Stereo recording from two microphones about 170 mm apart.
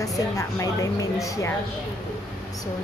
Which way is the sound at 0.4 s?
20° left (ahead or behind).